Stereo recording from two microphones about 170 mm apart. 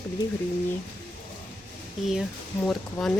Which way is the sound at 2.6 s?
Centre (ahead or behind).